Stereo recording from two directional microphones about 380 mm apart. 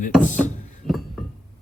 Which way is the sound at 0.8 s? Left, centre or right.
Centre.